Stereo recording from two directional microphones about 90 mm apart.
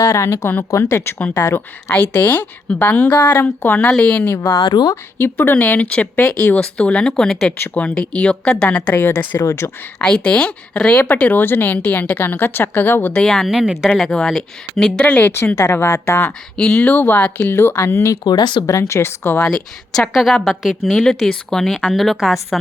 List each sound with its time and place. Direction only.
0.0 s speech: 35° left (ahead or behind); by 4.4 s 15° left (ahead or behind)
4.4 s speech: 30° left (ahead or behind)
4.6 s speech: 50° left (ahead or behind)
5.1 s speech: 25° left (ahead or behind); by 7.5 s 5° left (ahead or behind)
7.5 s speech: 20° left (ahead or behind)
9.0 s speech: 25° left (ahead or behind)
10.0 s speech: 10° left (ahead or behind)
13.1 s a woman's voice: 5° left (ahead or behind)
15.5 s speech: 30° left (ahead or behind)
16.6 s speech: 10° left (ahead or behind); by 18.2 s 30° left (ahead or behind)
18.2 s speech: 50° left (ahead or behind)
18.6 s speech: 35° left (ahead or behind)
20.0 s a woman's voice: centre (ahead or behind)
20.9 s a woman's voice: 10° left (ahead or behind)